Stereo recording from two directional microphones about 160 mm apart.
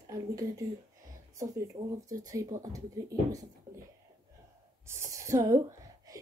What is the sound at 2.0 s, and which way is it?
Speech, 20° right (ahead or behind).